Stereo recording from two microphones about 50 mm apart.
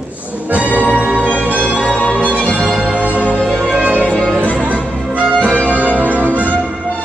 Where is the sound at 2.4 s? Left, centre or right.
Left.